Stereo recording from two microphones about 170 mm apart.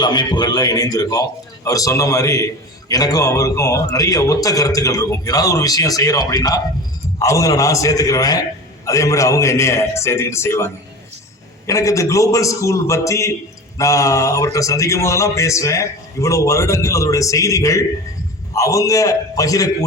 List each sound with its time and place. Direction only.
0.0 s a man's voice: 25° left (ahead or behind)